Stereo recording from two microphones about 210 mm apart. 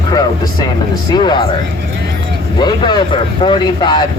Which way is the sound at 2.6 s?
20° left (ahead or behind).